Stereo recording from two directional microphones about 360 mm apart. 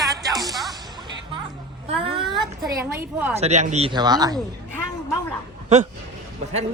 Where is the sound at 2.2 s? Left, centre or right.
Centre.